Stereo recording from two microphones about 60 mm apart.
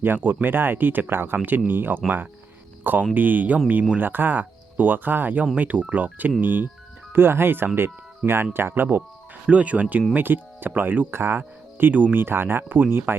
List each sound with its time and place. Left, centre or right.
0.0 s speech: right
8.2 s speech: centre
8.5 s speech: right
11.1 s speech: right